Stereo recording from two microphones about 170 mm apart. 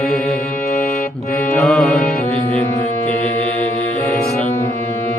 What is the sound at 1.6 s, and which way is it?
Music, centre (ahead or behind).